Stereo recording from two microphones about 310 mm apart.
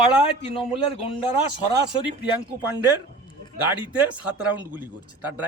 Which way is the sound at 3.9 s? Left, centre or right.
Centre.